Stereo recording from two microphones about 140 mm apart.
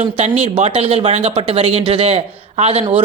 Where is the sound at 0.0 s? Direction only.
55° right (ahead or behind).